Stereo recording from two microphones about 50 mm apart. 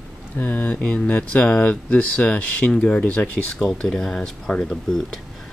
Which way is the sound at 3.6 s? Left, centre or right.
Centre.